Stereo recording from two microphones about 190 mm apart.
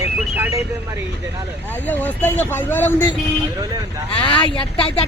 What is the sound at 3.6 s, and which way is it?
Speech, 20° right (ahead or behind).